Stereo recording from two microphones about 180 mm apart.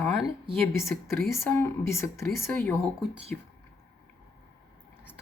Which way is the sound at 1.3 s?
15° left (ahead or behind).